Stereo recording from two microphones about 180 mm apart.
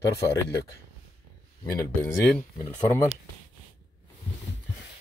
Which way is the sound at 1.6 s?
20° left (ahead or behind).